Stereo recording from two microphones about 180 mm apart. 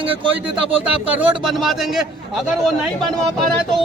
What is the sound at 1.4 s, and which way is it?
A man's voice, centre (ahead or behind).